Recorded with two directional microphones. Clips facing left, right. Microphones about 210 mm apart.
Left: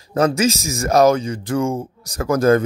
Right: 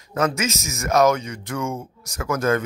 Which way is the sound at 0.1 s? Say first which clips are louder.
Left 6 dB; 35° left (ahead or behind).